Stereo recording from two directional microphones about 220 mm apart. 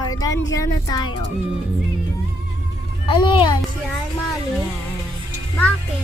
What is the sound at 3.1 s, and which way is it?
Speech, 20° left (ahead or behind).